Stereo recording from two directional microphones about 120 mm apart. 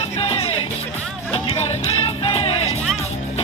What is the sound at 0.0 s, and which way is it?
Music, 55° left (ahead or behind).